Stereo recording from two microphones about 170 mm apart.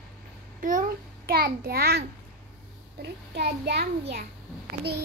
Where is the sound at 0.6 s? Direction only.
50° right (ahead or behind); by 2.1 s 70° right (ahead or behind).